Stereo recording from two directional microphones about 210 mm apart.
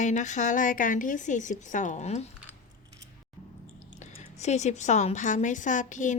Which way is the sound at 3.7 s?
35° left (ahead or behind).